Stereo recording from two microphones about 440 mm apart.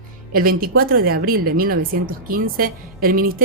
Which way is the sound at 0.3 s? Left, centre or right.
Centre.